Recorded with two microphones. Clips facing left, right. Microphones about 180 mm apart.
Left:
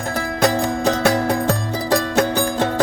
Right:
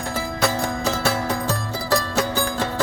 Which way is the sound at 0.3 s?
55° left (ahead or behind).